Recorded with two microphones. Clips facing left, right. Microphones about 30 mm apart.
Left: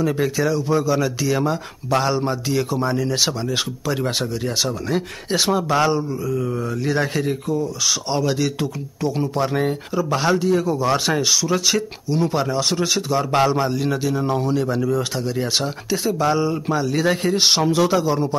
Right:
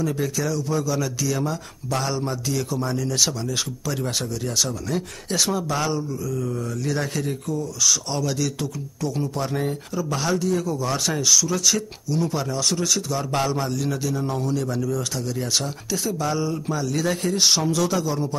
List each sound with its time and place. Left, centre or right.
0.0 s speech: left